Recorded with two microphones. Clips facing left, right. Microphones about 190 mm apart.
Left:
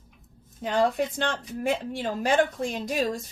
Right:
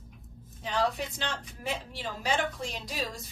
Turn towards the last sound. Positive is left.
turn(degrees=50)  # may be behind; listen again after turning